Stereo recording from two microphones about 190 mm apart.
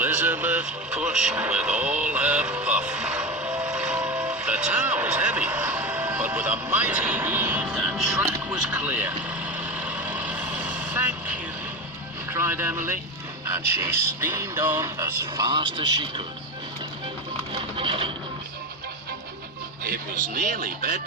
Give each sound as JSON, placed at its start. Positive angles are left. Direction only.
{"t": 0.0, "sound": "vehicle", "side_deg": -10}
{"t": 12.3, "sound": "music", "side_deg": -10}
{"t": 17.7, "sound": "speech", "side_deg": -30}
{"t": 19.8, "sound": "speech", "side_deg": -45}